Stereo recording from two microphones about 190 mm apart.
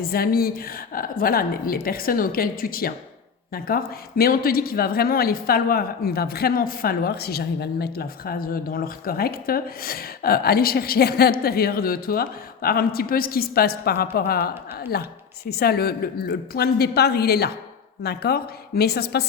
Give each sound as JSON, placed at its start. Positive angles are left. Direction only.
{"t": 0.0, "sound": "a woman's voice", "side_deg": 50}